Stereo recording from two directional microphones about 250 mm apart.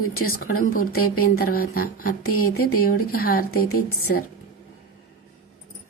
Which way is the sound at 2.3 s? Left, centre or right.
Left.